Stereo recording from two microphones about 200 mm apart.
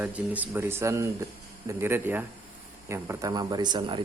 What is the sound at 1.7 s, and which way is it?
Speech, 15° right (ahead or behind).